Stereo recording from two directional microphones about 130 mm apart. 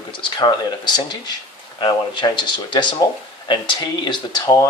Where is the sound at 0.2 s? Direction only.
35° left (ahead or behind).